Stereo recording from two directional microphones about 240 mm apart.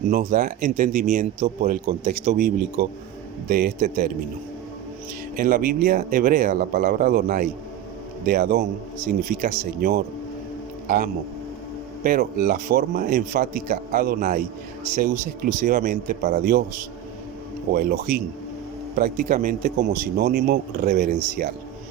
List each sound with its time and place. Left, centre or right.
0.1 s speech: right
5.4 s speech: right
17.7 s speech: right